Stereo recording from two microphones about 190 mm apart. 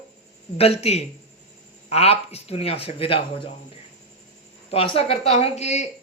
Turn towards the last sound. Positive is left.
turn(degrees=35)  # may be behind; listen again after turning